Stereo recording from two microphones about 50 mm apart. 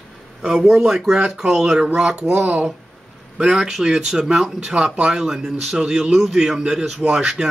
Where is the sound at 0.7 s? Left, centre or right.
Centre.